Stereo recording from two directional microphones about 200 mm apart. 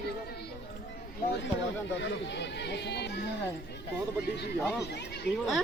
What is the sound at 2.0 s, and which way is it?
Speech, 60° left (ahead or behind).